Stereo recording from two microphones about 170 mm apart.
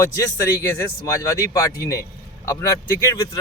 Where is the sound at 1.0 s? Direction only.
15° left (ahead or behind).